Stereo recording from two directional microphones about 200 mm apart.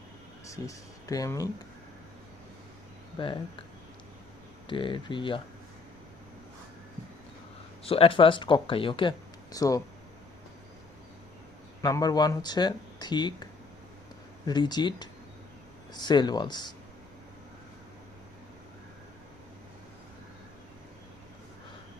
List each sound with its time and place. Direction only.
0.4 s speech: 15° left (ahead or behind)
3.2 s speech: 25° left (ahead or behind)
4.6 s speech: 25° left (ahead or behind)
7.9 s speech: 30° left (ahead or behind)
11.8 s speech: 20° left (ahead or behind)